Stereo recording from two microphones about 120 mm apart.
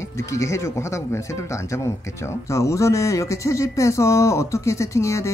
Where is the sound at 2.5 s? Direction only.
25° left (ahead or behind).